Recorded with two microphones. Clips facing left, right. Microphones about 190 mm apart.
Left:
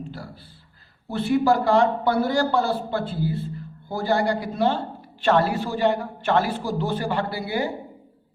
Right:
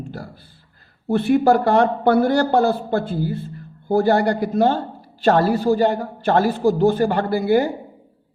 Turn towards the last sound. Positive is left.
turn(degrees=-45)  # may be behind; listen again after turning